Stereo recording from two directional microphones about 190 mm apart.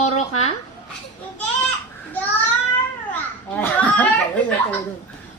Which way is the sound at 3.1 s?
10° left (ahead or behind).